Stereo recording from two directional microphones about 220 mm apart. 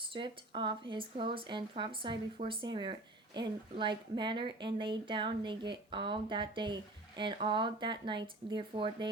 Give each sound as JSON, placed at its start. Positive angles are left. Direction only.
{"t": 0.1, "sound": "speech", "side_deg": -20}